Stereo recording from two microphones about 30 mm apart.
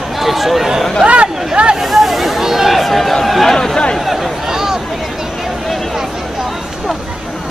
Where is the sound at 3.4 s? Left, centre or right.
Centre.